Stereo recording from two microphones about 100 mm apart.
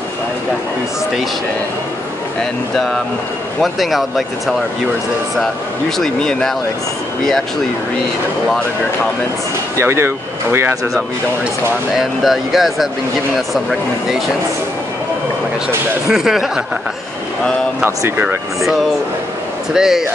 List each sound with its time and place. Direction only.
2.7 s speech: 5° left (ahead or behind)
5.4 s speech: 5° left (ahead or behind)
9.8 s speech: 25° right (ahead or behind)
12.0 s speech: centre (ahead or behind)
16.1 s speech: 5° right (ahead or behind)
17.8 s speech: 25° right (ahead or behind)
19.7 s speech: 5° right (ahead or behind)